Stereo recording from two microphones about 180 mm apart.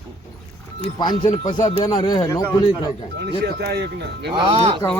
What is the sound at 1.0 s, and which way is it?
Speech, 25° left (ahead or behind).